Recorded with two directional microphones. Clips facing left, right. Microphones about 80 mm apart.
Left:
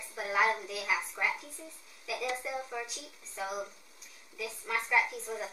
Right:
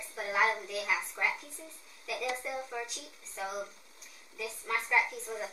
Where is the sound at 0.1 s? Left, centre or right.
Centre.